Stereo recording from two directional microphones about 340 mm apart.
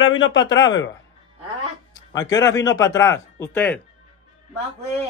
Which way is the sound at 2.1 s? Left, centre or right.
Centre.